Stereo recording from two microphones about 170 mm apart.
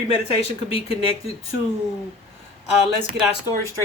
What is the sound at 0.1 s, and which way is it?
Speech, 35° left (ahead or behind).